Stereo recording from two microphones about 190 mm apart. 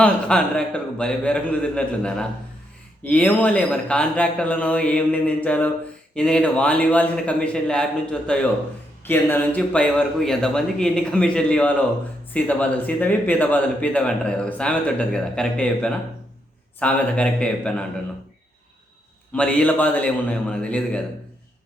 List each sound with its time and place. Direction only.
0.0 s speech: 5° left (ahead or behind)
19.3 s speech: 5° left (ahead or behind)